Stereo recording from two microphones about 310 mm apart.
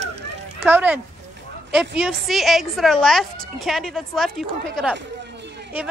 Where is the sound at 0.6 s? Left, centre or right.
Centre.